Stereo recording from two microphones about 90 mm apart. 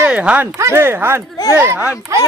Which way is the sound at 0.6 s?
30° right (ahead or behind).